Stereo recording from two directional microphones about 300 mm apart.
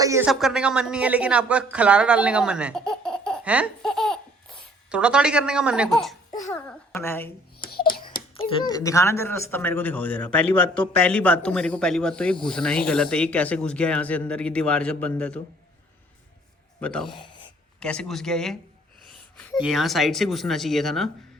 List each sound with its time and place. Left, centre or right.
0.0 s speech: centre
6.5 s babbling: centre
8.4 s speech: centre
16.8 s speech: centre
17.1 s a sound: centre
17.7 s speech: centre